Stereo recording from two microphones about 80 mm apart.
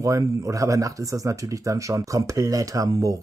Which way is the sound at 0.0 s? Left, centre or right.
Right.